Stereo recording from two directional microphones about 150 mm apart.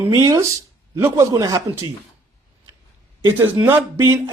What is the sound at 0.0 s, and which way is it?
Speech, 20° right (ahead or behind).